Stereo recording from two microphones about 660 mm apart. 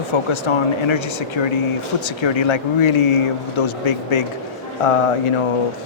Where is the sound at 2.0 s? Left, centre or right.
Left.